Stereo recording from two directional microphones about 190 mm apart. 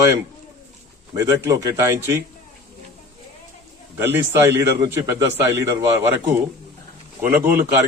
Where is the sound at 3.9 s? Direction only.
10° right (ahead or behind).